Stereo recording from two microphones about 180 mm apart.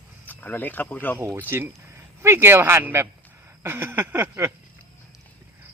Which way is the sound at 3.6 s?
10° right (ahead or behind).